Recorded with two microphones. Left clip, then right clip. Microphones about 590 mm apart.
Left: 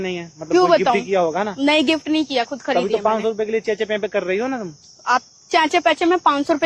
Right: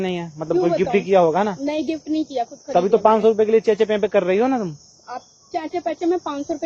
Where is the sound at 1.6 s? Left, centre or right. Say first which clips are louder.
Left 7 dB; left.